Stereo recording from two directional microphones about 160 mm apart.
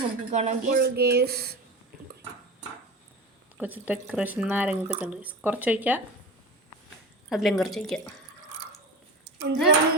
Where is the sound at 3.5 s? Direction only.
10° right (ahead or behind).